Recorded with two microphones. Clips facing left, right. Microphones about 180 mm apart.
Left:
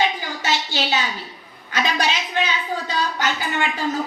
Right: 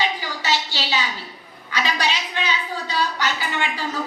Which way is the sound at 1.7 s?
45° left (ahead or behind).